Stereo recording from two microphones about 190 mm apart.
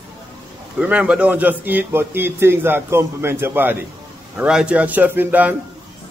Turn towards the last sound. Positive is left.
turn(degrees=-10)  # may be behind; listen again after turning